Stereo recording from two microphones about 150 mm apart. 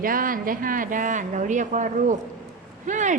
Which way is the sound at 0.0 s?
70° right (ahead or behind).